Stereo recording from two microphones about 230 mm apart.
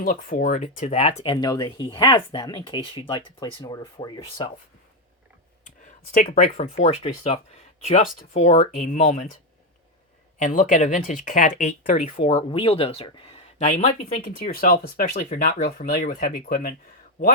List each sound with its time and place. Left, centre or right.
0.0 s speech: left
5.6 s speech: left
7.9 s speech: left